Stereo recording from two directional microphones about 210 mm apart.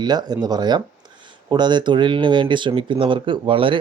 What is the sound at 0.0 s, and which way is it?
Speech, 20° right (ahead or behind).